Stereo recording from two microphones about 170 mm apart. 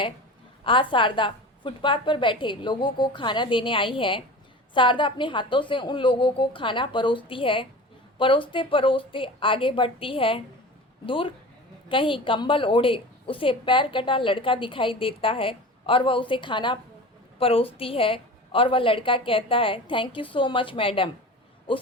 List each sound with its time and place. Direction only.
0.6 s a woman's voice: 30° left (ahead or behind)